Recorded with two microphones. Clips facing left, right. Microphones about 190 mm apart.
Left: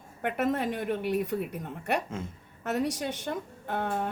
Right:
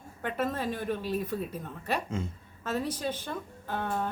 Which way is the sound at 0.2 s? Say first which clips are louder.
Left 3 dB; 65° left (ahead or behind).